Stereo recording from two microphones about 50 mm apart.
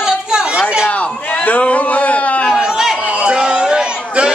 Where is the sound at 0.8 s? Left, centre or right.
Left.